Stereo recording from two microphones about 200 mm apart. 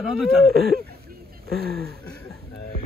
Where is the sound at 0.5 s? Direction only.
50° right (ahead or behind).